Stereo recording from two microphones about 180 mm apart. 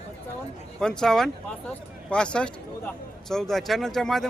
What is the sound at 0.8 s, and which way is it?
Speech, 5° left (ahead or behind).